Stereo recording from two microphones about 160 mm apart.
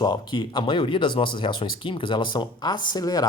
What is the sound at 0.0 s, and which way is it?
Speech, 30° left (ahead or behind).